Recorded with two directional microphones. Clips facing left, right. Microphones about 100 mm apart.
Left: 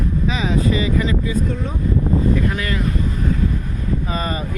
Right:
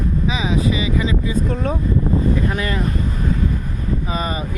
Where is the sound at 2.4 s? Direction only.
30° right (ahead or behind).